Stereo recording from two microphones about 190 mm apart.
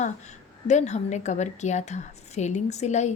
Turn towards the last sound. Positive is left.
turn(degrees=35)  # may be behind; listen again after turning